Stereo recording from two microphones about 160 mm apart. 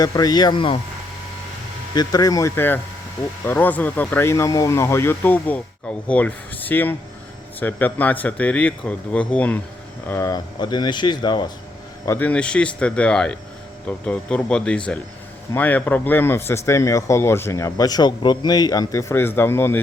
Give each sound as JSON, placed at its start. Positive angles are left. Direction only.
{"t": 0.0, "sound": "speech", "side_deg": 25}
{"t": 2.0, "sound": "speech", "side_deg": 25}
{"t": 12.0, "sound": "speech", "side_deg": 15}